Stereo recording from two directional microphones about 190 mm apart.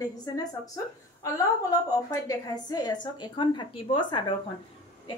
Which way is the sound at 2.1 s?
20° left (ahead or behind).